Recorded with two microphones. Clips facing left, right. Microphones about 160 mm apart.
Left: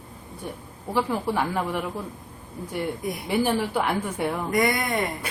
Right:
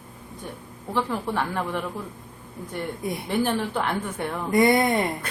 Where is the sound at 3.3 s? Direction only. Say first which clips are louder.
Left 2 dB; 10° left (ahead or behind).